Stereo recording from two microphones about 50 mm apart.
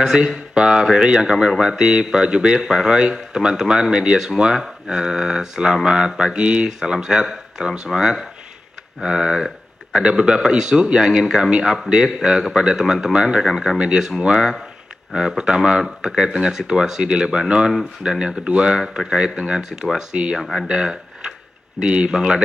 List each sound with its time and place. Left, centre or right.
0.0 s a man's voice: centre
13.5 s speech: centre
13.7 s a man's voice: centre